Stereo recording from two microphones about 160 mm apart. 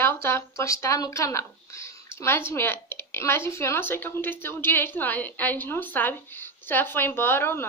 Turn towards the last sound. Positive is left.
turn(degrees=15)  # may be behind; listen again after turning